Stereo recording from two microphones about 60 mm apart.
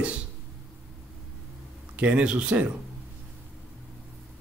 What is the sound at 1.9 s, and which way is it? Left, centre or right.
Speech, centre.